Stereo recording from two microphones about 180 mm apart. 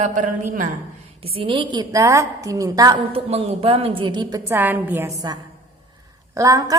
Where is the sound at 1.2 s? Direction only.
30° right (ahead or behind); by 5.1 s 10° right (ahead or behind).